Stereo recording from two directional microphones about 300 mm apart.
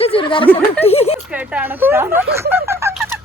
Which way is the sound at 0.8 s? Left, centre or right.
Left.